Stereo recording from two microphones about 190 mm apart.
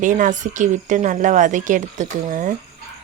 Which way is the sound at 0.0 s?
40° right (ahead or behind).